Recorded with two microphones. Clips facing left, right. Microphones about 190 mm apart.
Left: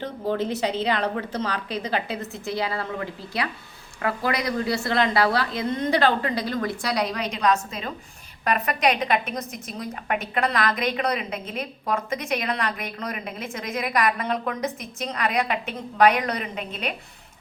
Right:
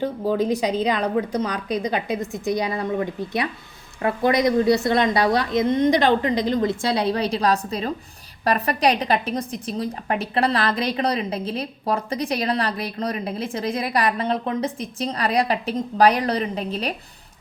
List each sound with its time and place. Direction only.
0.0 s a woman's voice: 10° right (ahead or behind); by 16.9 s 35° right (ahead or behind)